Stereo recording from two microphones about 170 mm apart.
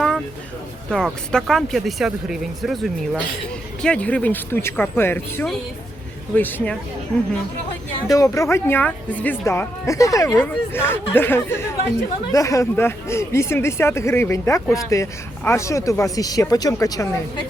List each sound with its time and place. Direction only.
0.9 s speech: 5° left (ahead or behind)
8.1 s speech: 20° left (ahead or behind)